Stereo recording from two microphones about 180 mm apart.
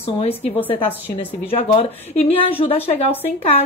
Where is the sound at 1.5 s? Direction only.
35° left (ahead or behind).